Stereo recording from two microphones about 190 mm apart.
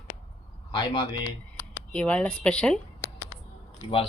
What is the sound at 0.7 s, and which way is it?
Speech, 25° left (ahead or behind).